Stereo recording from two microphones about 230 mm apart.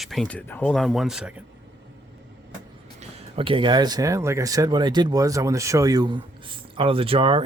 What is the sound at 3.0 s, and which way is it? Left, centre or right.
A man's voice, right.